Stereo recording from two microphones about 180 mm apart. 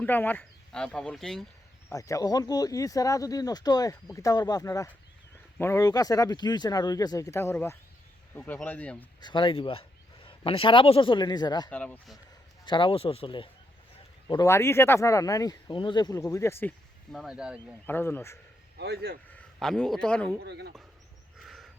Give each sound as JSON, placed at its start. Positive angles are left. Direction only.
{"t": 0.0, "sound": "speech", "side_deg": 10}
{"t": 1.9, "sound": "speech", "side_deg": 15}
{"t": 9.2, "sound": "speech", "side_deg": 25}
{"t": 11.7, "sound": "speech", "side_deg": 5}
{"t": 12.6, "sound": "speech", "side_deg": 25}
{"t": 17.1, "sound": "speech", "side_deg": 0}
{"t": 17.8, "sound": "speech", "side_deg": 10}
{"t": 18.8, "sound": "speech", "side_deg": -60}
{"t": 19.3, "sound": "a man's voice", "side_deg": 5}
{"t": 20.4, "sound": "speech", "side_deg": -65}
{"t": 21.4, "sound": "a sound", "side_deg": 0}